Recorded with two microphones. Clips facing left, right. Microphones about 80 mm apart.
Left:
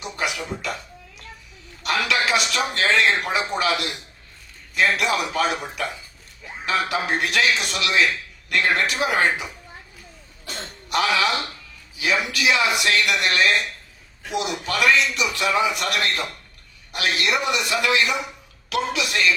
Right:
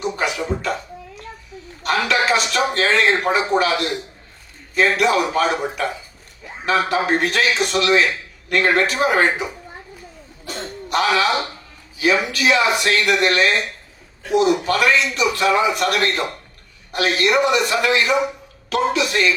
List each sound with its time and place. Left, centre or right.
0.1 s music: right
1.8 s a man's voice: right
10.9 s a man's voice: right
12.4 s a man's voice: right